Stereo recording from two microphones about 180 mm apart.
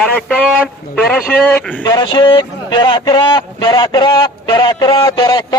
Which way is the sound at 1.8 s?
25° left (ahead or behind).